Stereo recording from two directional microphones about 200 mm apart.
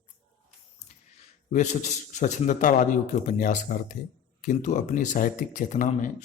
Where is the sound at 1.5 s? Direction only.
35° left (ahead or behind).